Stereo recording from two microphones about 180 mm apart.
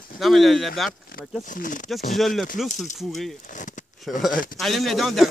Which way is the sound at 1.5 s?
45° left (ahead or behind).